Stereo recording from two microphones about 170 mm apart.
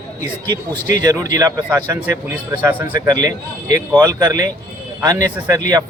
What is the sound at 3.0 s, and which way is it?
Speech, 20° right (ahead or behind).